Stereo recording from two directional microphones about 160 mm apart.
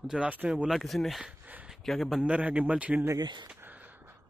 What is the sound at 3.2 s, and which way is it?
Speech, 25° right (ahead or behind).